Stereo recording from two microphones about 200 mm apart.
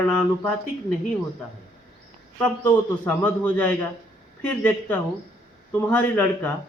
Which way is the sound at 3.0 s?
10° left (ahead or behind).